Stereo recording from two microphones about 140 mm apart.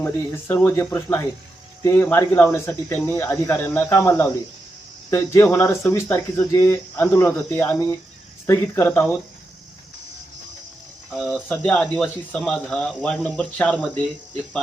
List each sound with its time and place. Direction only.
0.0 s speech: 15° left (ahead or behind)
11.1 s speech: centre (ahead or behind)